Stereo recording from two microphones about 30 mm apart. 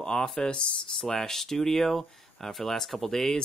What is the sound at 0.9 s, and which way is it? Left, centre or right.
Speech, centre.